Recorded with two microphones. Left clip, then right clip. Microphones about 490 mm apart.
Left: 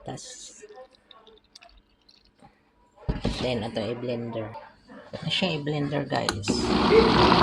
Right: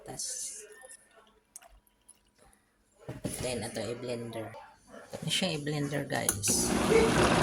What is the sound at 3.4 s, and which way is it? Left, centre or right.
Speech, right.